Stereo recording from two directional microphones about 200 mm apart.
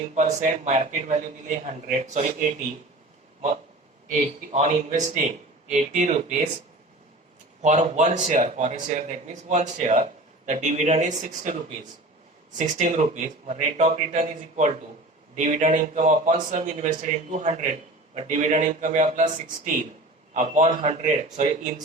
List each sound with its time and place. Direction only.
0.1 s a man's voice: 35° right (ahead or behind)
4.5 s a man's voice: 35° right (ahead or behind)
7.6 s a man's voice: 35° right (ahead or behind)
12.5 s a man's voice: 40° right (ahead or behind)